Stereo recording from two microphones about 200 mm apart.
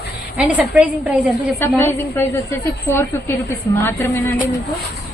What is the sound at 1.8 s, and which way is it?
A woman's voice, 10° left (ahead or behind).